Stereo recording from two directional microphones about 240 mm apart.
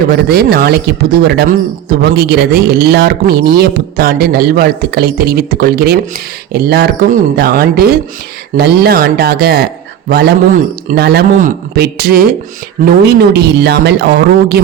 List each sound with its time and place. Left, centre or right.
0.1 s speech: right